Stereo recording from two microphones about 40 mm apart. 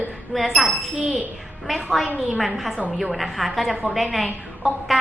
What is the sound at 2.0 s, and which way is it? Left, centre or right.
Speech, right.